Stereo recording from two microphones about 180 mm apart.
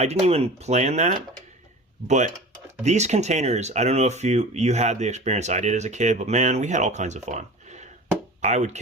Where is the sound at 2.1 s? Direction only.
40° right (ahead or behind).